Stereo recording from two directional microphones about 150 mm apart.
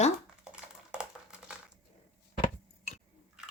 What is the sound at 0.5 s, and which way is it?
Typing, 5° right (ahead or behind).